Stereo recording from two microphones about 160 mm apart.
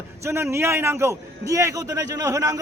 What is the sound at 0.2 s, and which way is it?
A man's voice, 15° right (ahead or behind).